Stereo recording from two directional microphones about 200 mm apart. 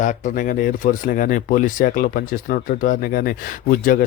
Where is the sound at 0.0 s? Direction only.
40° left (ahead or behind).